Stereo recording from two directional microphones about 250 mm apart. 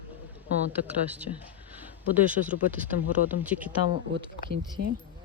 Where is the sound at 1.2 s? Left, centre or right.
Centre.